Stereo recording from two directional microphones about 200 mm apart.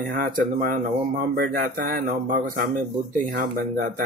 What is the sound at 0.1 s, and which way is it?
Speech, 40° right (ahead or behind).